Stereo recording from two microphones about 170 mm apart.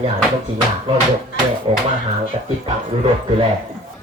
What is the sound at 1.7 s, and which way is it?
Speech, 30° right (ahead or behind).